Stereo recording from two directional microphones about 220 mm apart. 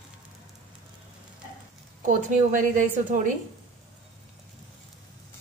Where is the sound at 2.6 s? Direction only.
35° right (ahead or behind).